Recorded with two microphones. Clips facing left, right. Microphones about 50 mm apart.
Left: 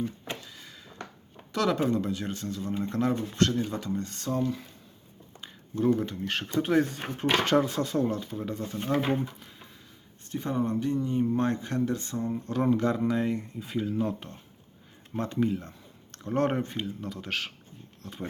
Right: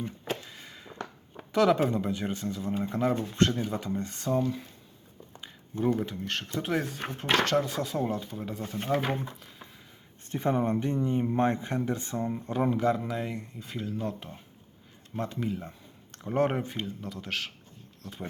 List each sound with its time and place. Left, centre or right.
0.0 s a sound: right
1.5 s speech: centre
3.3 s speech: right; by 4.6 s centre
5.9 s speech: centre
10.3 s speech: right; by 18.3 s centre